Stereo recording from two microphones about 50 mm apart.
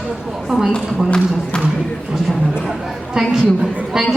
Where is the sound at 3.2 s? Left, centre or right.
Centre.